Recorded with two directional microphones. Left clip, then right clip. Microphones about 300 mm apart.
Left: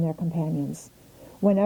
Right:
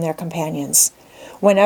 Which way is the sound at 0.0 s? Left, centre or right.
Centre.